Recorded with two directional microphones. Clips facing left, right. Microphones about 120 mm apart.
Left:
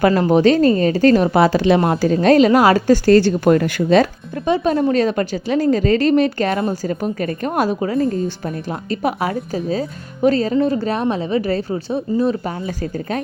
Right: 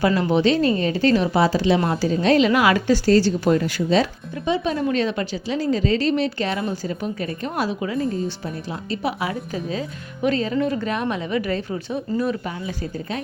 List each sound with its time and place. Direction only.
0.0 s a woman's voice: 45° left (ahead or behind)